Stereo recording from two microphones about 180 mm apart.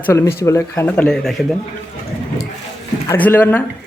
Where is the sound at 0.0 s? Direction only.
15° left (ahead or behind).